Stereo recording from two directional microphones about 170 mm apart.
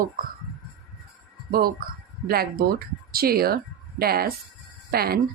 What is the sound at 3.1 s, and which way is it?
A woman's voice, 65° right (ahead or behind).